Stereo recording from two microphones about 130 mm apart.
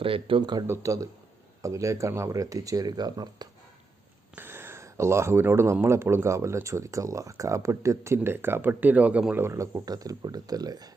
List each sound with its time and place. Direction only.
0.0 s speech: 45° right (ahead or behind)
0.7 s speech: 25° right (ahead or behind)
4.4 s speech: 15° right (ahead or behind)